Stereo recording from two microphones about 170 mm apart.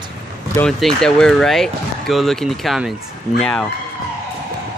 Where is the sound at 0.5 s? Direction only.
5° left (ahead or behind).